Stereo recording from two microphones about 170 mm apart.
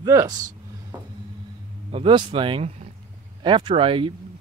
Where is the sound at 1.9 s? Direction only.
30° right (ahead or behind).